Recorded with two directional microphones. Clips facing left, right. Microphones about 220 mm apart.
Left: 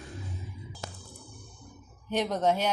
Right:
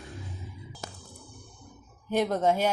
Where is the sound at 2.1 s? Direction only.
10° right (ahead or behind).